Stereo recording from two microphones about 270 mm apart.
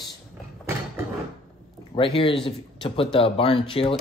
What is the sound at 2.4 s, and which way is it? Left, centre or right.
A man's voice, centre.